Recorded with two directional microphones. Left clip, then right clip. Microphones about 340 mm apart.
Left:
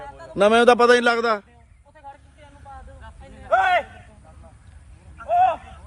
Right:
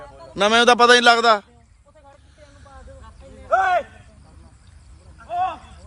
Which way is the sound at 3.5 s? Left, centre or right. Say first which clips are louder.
Even; left.